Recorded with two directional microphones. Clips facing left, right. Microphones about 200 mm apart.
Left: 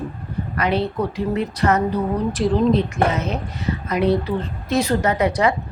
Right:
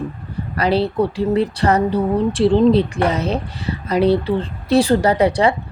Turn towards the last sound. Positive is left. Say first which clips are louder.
# right 3 dB
turn(degrees=-30)  # may be behind; listen again after turning